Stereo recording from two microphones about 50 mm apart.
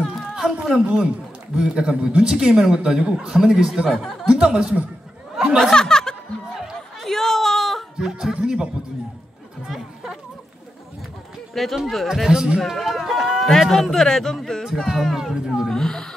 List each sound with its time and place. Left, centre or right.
0.0 s a sound: centre
1.6 s speech: centre
3.9 s speech: centre
4.3 s speech: centre
5.3 s a sound: centre
5.6 s speech: centre
6.5 s chatter: centre
8.0 s speech: centre
9.7 s chatter: centre
11.5 s speech: centre
12.1 s speech: centre
12.6 s speech: centre
15.1 s speech: centre
15.7 s speech: centre